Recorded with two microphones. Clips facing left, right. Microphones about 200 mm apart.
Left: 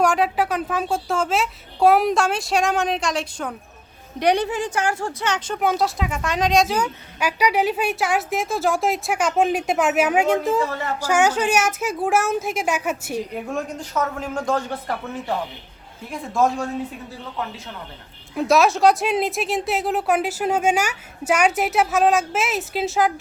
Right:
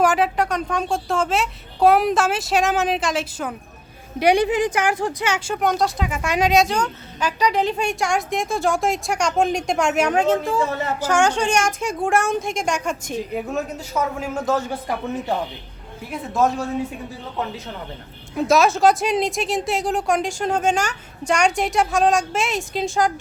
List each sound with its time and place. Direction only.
0.0 s a woman's voice: centre (ahead or behind)
5.6 s a woman's voice: 5° left (ahead or behind)
10.7 s a woman's voice: 20° right (ahead or behind)
11.0 s a woman's voice: 10° left (ahead or behind)
13.3 s a woman's voice: 5° right (ahead or behind)
16.1 s a woman's voice: centre (ahead or behind)
18.3 s a woman's voice: centre (ahead or behind)